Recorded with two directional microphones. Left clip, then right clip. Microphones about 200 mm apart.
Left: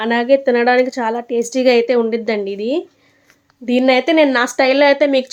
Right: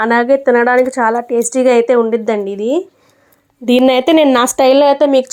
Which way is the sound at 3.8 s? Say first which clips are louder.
Right 2 dB; 35° right (ahead or behind).